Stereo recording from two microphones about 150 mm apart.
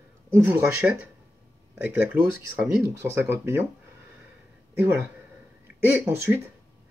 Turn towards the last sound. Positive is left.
turn(degrees=-15)  # may be behind; listen again after turning